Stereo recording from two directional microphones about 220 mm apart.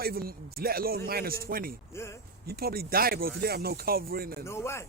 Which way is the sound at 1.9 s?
10° left (ahead or behind).